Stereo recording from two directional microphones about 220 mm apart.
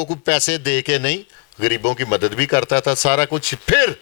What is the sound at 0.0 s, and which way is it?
A man's voice, 10° left (ahead or behind).